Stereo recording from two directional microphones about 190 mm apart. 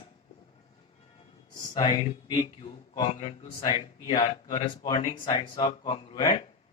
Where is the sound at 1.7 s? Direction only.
25° left (ahead or behind).